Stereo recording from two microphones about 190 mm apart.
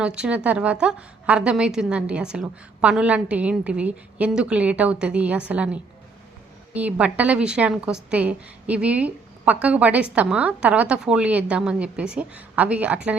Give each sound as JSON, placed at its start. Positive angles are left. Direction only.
{"t": 0.0, "sound": "a woman's voice", "side_deg": -5}